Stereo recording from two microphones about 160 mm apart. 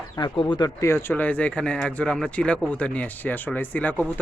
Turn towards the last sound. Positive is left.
turn(degrees=10)  # may be behind; listen again after turning